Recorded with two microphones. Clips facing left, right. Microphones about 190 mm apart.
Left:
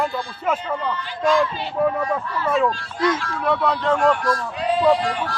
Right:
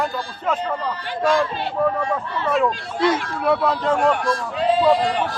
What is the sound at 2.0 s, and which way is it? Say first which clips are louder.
Speech: even; 25° right (ahead or behind).